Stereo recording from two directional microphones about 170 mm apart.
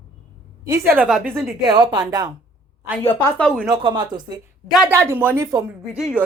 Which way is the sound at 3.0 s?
15° left (ahead or behind).